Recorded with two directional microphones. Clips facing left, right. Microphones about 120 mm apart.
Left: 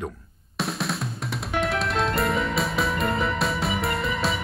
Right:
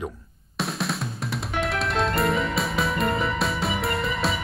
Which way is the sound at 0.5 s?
Centre (ahead or behind).